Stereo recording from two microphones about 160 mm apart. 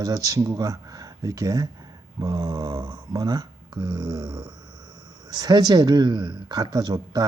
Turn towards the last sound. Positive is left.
turn(degrees=-25)  # may be behind; listen again after turning